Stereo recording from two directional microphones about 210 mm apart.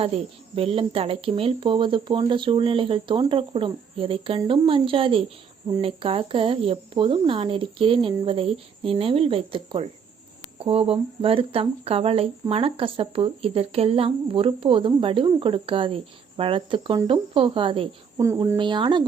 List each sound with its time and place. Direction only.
0.0 s speech: 25° right (ahead or behind)